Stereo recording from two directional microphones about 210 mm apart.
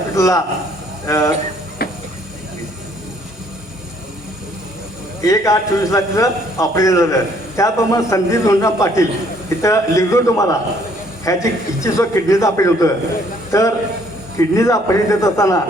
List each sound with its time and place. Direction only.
0.1 s a man's voice: 15° left (ahead or behind)
1.8 s a sound: 45° left (ahead or behind)
5.2 s a man's voice: 15° left (ahead or behind)